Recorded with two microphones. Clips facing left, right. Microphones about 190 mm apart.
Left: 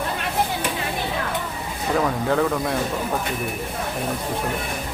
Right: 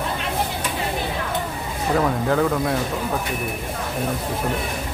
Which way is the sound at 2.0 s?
Centre (ahead or behind).